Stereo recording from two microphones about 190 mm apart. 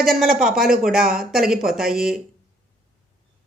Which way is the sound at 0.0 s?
Centre (ahead or behind).